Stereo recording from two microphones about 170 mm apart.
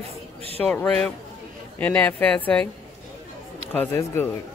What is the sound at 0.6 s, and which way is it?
Speech, 10° left (ahead or behind).